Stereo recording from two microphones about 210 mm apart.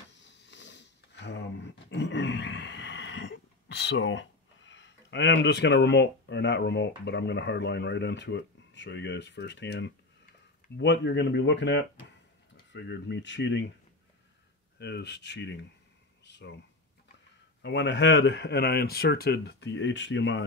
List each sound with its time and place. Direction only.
0.2 s sniff: 60° left (ahead or behind)
10.8 s speech: 55° left (ahead or behind)
14.8 s speech: 55° left (ahead or behind)
17.6 s speech: 55° left (ahead or behind)